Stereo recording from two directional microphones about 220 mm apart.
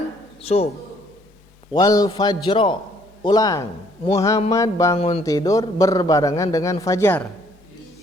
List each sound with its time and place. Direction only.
0.4 s a man's voice: 25° left (ahead or behind)
1.7 s a man's voice: 15° left (ahead or behind)
4.9 s a man's voice: 25° left (ahead or behind)
5.2 s a man's voice: 15° left (ahead or behind)